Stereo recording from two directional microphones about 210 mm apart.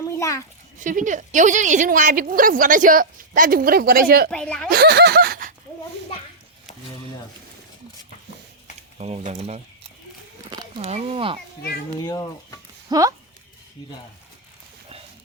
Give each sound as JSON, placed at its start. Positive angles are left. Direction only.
{"t": 0.1, "sound": "a sound", "side_deg": 15}
{"t": 0.8, "sound": "a woman's voice", "side_deg": -40}
{"t": 4.3, "sound": "speech", "side_deg": 5}
{"t": 4.7, "sound": "a sound", "side_deg": -50}
{"t": 9.0, "sound": "speech", "side_deg": -30}
{"t": 10.5, "sound": "speech", "side_deg": -25}
{"t": 12.0, "sound": "speech", "side_deg": 15}
{"t": 12.9, "sound": "speech", "side_deg": -15}